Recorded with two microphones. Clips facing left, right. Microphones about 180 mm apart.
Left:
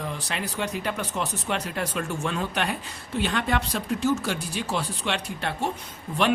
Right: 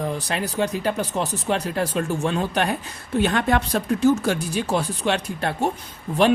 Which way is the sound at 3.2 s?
45° right (ahead or behind).